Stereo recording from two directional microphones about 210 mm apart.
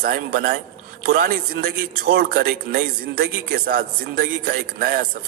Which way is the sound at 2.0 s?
45° right (ahead or behind).